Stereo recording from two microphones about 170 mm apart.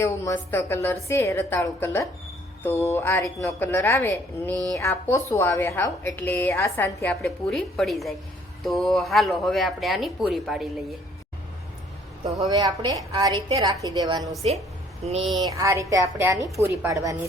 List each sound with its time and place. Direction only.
0.0 s a woman's voice: 15° left (ahead or behind)
7.2 s speech: centre (ahead or behind)
12.5 s a woman's voice: 25° right (ahead or behind)
15.0 s speech: 40° right (ahead or behind)
15.4 s a woman's voice: 20° right (ahead or behind)